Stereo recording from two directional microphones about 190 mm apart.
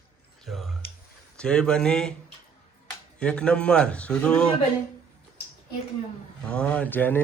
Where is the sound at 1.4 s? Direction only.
5° left (ahead or behind).